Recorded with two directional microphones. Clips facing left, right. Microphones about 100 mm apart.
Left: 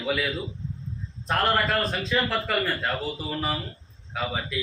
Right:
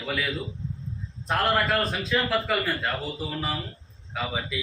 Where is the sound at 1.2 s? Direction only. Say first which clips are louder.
Even; centre (ahead or behind).